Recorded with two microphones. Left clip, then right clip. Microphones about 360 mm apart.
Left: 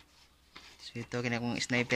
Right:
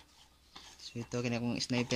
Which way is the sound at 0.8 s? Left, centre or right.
Centre.